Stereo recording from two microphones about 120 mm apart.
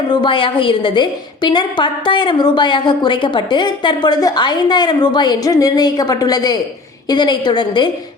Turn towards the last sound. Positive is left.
turn(degrees=40)  # may be behind; listen again after turning